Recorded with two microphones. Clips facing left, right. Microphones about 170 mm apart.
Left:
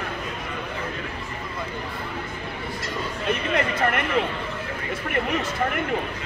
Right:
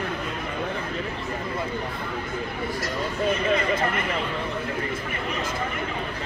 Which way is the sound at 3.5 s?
65° left (ahead or behind).